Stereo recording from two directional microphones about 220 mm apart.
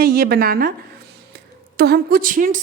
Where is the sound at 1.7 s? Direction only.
45° right (ahead or behind).